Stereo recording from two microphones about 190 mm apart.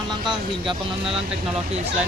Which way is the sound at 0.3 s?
25° right (ahead or behind).